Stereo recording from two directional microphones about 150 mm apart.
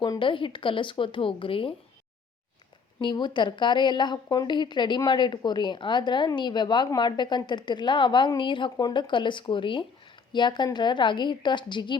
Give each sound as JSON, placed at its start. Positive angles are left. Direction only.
{"t": 0.0, "sound": "a woman's voice", "side_deg": 30}
{"t": 3.0, "sound": "a woman's voice", "side_deg": 30}